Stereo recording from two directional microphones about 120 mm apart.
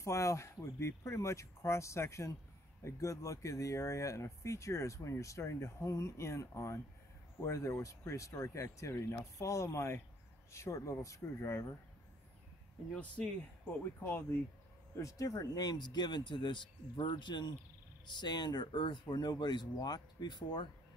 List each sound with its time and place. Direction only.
0.0 s speech: 25° left (ahead or behind)
12.9 s speech: 10° left (ahead or behind)
15.0 s speech: 25° left (ahead or behind)